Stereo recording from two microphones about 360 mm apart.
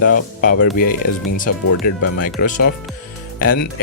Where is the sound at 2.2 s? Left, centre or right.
Left.